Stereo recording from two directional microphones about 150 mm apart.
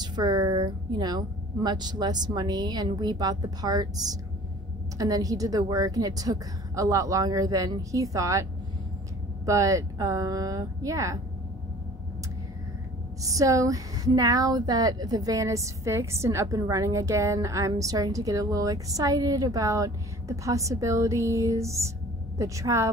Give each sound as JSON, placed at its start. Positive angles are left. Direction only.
{"t": 0.0, "sound": "speech", "side_deg": -30}
{"t": 9.5, "sound": "speech", "side_deg": -20}
{"t": 13.2, "sound": "speech", "side_deg": -20}